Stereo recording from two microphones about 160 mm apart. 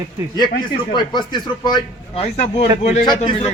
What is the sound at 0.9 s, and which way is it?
Speech, 25° left (ahead or behind).